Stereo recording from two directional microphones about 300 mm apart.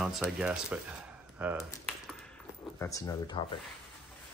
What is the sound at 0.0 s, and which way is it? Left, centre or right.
Speech, centre.